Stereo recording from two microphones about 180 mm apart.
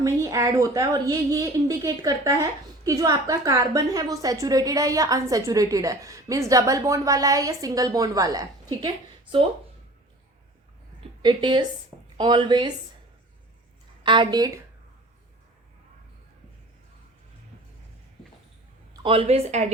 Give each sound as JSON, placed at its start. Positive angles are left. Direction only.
{"t": 0.0, "sound": "a woman's voice", "side_deg": -15}
{"t": 11.2, "sound": "a woman's voice", "side_deg": -25}
{"t": 14.0, "sound": "a woman's voice", "side_deg": -25}
{"t": 19.0, "sound": "speech", "side_deg": -30}